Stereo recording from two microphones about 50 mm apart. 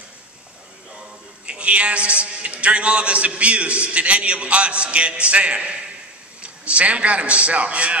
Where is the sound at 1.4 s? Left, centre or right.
Right.